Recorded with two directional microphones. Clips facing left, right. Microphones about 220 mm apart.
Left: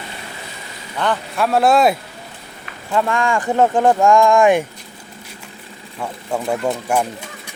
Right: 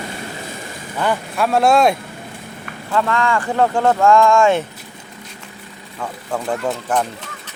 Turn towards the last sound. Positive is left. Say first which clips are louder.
# left 2 dB
turn(degrees=10)  # may be behind; listen again after turning